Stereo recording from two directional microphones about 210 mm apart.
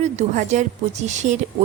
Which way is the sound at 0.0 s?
35° right (ahead or behind).